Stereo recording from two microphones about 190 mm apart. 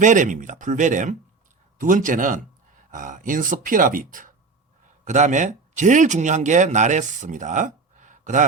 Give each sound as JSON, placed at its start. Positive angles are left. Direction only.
{"t": 0.0, "sound": "speech", "side_deg": -40}